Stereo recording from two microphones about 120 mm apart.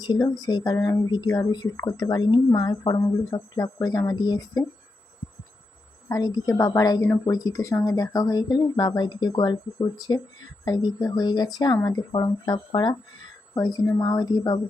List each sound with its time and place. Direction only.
0.0 s speech: 35° left (ahead or behind)
6.1 s speech: 30° left (ahead or behind)